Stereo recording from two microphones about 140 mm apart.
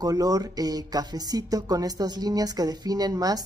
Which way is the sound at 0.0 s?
25° right (ahead or behind).